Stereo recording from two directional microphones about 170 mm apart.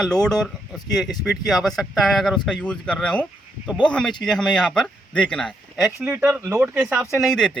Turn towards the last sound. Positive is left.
turn(degrees=0)  # may be behind; listen again after turning